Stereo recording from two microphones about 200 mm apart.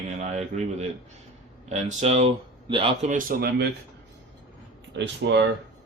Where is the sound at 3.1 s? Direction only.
45° right (ahead or behind).